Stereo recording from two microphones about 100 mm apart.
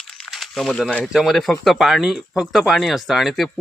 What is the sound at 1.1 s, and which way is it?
Speech, centre (ahead or behind).